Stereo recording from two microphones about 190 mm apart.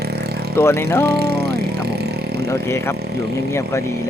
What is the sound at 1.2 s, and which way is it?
Vehicle, 55° right (ahead or behind).